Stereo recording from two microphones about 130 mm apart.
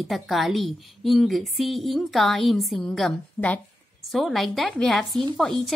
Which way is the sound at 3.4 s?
20° left (ahead or behind).